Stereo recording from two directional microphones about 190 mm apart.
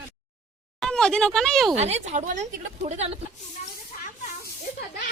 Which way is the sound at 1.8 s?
35° right (ahead or behind).